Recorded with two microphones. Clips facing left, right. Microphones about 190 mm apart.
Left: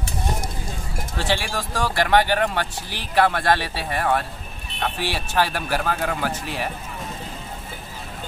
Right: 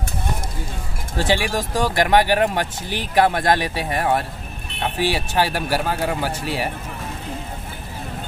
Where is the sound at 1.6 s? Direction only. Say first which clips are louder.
Right 3 dB; 20° right (ahead or behind).